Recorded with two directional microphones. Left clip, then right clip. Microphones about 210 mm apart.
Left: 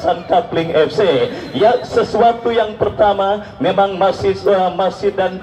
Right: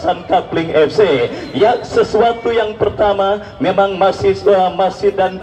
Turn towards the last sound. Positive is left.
turn(degrees=15)  # may be behind; listen again after turning